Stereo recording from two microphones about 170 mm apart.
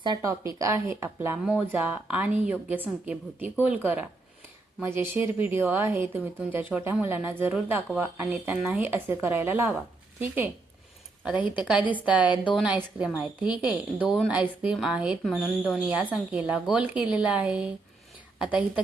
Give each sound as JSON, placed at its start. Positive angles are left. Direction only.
{"t": 0.0, "sound": "a woman's voice", "side_deg": -25}